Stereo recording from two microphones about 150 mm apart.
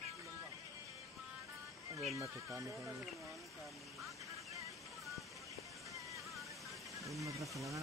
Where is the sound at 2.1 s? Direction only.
20° right (ahead or behind).